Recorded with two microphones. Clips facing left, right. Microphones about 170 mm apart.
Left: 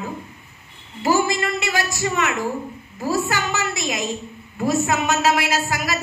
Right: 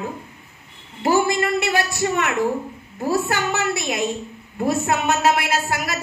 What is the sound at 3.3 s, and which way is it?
Speech, 55° right (ahead or behind).